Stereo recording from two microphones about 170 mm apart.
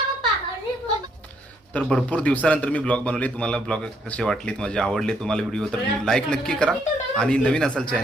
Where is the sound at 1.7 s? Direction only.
5° left (ahead or behind).